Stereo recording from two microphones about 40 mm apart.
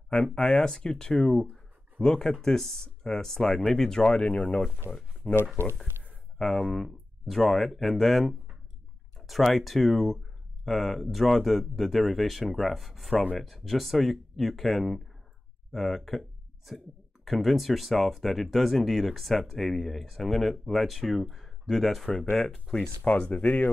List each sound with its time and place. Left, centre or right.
0.1 s speech: centre
13.1 s speech: left
13.4 s speech: centre
23.0 s speech: left